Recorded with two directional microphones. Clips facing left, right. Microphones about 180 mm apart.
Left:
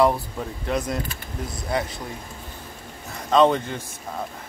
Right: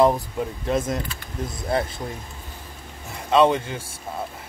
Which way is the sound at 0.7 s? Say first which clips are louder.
Right 2 dB; 25° right (ahead or behind).